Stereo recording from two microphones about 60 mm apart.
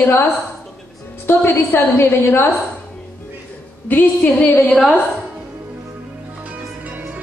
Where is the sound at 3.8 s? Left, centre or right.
Left.